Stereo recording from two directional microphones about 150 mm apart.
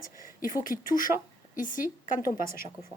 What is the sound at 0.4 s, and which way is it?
A woman's voice, 65° left (ahead or behind).